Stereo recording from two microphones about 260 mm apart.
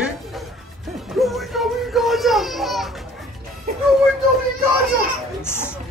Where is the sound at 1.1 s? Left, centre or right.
Centre.